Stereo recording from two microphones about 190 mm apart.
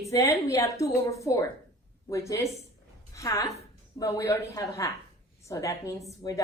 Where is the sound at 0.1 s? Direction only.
15° left (ahead or behind).